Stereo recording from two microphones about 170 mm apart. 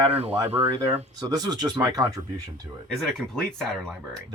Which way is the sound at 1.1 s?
20° right (ahead or behind).